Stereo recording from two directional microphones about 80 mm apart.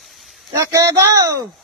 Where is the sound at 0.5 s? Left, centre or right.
Right.